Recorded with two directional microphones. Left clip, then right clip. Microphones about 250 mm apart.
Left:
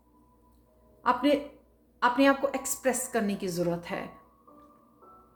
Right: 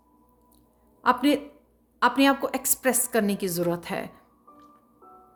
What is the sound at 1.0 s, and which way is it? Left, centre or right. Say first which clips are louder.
A woman's voice: right 3 dB; right.